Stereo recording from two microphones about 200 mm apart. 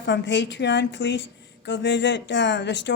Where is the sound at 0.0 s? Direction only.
60° left (ahead or behind).